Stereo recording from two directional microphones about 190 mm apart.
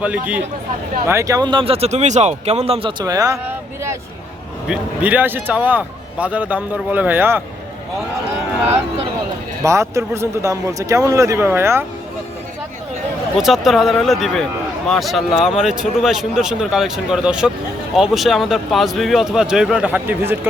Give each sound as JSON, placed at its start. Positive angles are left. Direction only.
{"t": 1.0, "sound": "speech", "side_deg": -15}
{"t": 3.0, "sound": "speech", "side_deg": -20}
{"t": 4.7, "sound": "speech", "side_deg": -10}
{"t": 9.6, "sound": "speech", "side_deg": -15}
{"t": 13.3, "sound": "speech", "side_deg": 0}